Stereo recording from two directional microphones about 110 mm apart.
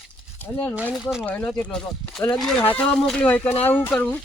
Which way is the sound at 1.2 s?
15° left (ahead or behind).